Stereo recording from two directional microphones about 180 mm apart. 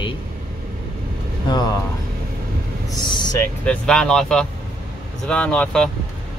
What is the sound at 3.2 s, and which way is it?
Vehicle, 20° left (ahead or behind).